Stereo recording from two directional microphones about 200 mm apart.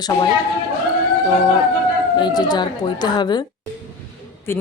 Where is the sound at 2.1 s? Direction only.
20° left (ahead or behind).